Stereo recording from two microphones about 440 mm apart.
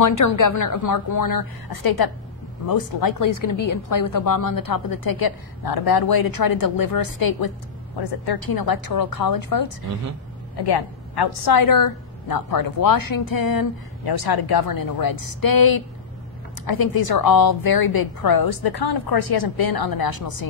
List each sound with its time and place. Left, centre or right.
0.0 s a woman's voice: left
8.0 s a woman's voice: left
10.6 s a woman's voice: left